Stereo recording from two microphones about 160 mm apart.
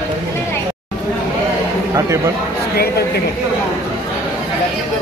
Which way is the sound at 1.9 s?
20° right (ahead or behind).